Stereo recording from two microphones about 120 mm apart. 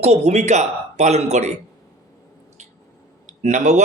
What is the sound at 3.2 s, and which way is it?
Speech, 90° right.